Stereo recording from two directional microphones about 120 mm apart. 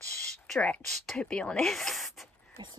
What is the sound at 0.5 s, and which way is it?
Speech, 5° left (ahead or behind).